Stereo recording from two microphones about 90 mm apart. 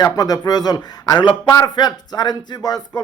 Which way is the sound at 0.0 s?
45° left (ahead or behind).